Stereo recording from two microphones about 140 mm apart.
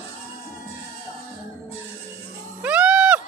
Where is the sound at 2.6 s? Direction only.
10° right (ahead or behind).